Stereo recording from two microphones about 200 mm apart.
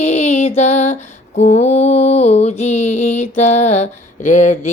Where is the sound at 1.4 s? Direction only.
35° left (ahead or behind).